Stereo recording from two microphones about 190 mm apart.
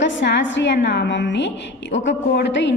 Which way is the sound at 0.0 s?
70° left (ahead or behind).